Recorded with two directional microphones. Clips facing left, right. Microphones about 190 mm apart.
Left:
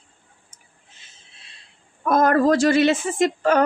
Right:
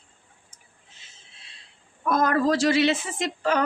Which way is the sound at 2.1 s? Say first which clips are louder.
Left 5 dB; 50° left (ahead or behind).